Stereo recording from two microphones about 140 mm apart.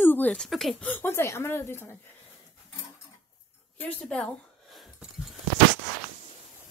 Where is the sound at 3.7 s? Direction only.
10° left (ahead or behind).